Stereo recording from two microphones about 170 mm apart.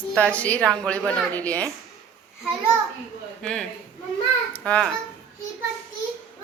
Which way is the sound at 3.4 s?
5° left (ahead or behind).